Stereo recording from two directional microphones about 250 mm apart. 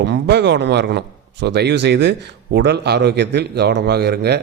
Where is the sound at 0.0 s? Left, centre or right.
Right.